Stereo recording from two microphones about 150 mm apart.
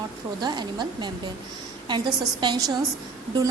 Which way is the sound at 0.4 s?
30° right (ahead or behind).